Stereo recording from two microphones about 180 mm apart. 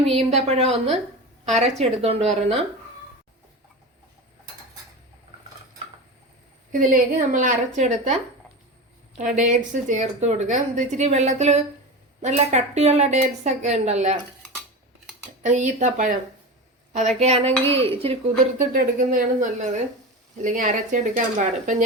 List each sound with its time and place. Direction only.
0.0 s a woman's voice: 35° right (ahead or behind)
6.7 s a woman's voice: 45° right (ahead or behind)
15.4 s a woman's voice: 40° right (ahead or behind)
18.5 s a woman's voice: 50° right (ahead or behind)